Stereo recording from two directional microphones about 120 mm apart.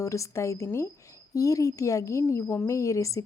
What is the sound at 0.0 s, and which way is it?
A woman's voice, 25° left (ahead or behind).